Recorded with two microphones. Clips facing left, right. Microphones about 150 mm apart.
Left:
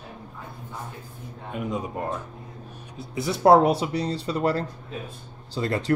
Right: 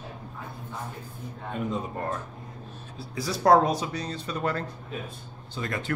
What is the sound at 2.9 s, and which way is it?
Speech, 20° left (ahead or behind).